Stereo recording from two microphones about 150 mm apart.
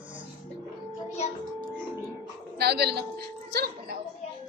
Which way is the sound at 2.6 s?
90° right.